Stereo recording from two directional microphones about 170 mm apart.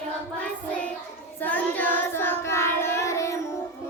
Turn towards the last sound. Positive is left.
turn(degrees=20)  # may be behind; listen again after turning